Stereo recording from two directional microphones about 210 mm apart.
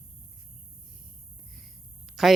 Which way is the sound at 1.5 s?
Centre (ahead or behind).